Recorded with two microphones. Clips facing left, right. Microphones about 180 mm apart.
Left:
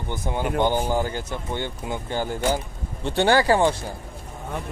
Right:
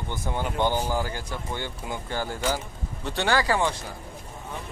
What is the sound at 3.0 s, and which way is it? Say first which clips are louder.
Speech: left 6 dB; 30° left (ahead or behind).